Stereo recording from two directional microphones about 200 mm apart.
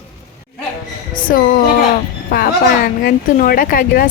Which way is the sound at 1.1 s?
45° left (ahead or behind).